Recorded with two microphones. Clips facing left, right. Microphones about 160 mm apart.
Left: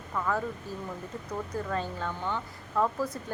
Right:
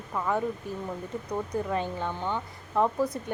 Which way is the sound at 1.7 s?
15° right (ahead or behind).